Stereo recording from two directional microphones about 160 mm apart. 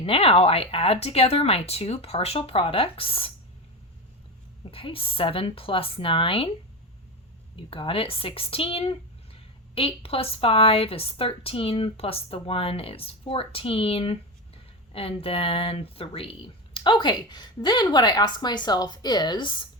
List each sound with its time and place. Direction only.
0.0 s speech: 35° left (ahead or behind)
4.7 s speech: 35° left (ahead or behind)
7.5 s speech: 35° left (ahead or behind)